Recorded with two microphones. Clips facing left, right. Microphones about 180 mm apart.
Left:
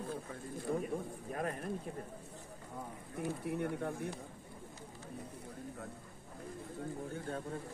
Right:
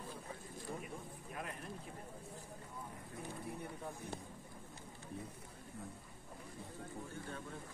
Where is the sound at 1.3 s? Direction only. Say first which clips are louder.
Left 9 dB; 45° left (ahead or behind).